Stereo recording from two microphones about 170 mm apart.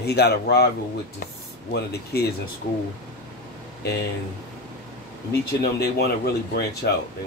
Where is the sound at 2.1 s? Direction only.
70° left (ahead or behind).